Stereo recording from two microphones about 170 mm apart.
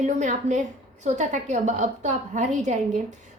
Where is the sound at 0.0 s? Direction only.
45° right (ahead or behind).